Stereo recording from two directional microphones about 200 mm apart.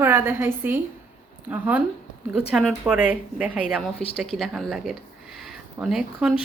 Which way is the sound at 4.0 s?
30° left (ahead or behind).